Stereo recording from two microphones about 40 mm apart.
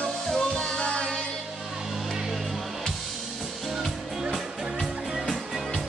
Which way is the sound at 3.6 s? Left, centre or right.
Centre.